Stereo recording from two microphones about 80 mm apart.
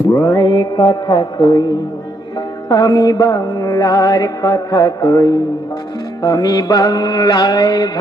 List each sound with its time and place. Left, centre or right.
0.1 s music: left
0.4 s music: left
2.7 s music: left
6.2 s mantra: left